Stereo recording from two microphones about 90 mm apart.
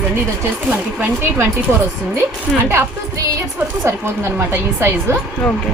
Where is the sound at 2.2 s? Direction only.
25° right (ahead or behind).